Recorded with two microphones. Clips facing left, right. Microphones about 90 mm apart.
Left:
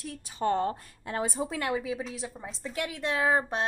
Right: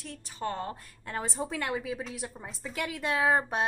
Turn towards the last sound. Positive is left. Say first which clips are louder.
# even
turn(degrees=-5)  # may be behind; listen again after turning